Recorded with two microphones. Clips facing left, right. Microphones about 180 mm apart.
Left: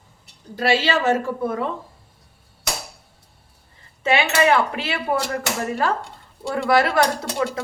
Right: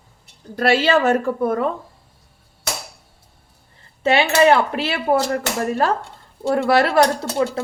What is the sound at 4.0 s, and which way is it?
Speech, 35° right (ahead or behind).